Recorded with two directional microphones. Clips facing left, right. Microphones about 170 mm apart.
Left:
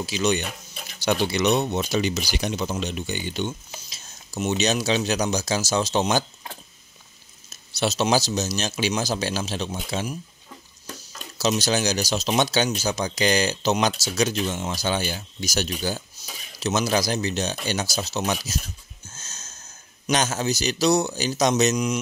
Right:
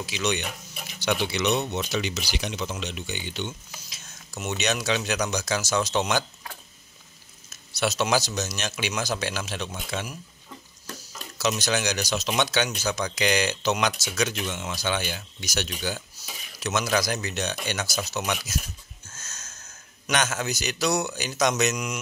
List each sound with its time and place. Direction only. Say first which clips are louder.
0.0 s speech: left 4 dB; 35° left (ahead or behind)
3.7 s a sound: left 3 dB; 30° left (ahead or behind)
4.5 s speech: left 4 dB; 30° left (ahead or behind)
11.3 s speech: left 3 dB; 30° left (ahead or behind)
19.0 s wheeze: left 1 dB; 25° left (ahead or behind)
20.1 s speech: left 3 dB; 30° left (ahead or behind)